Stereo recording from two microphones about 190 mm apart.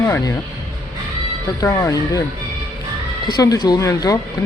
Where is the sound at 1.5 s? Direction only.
15° left (ahead or behind).